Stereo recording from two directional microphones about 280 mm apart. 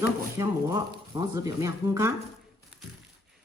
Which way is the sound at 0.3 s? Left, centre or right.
Centre.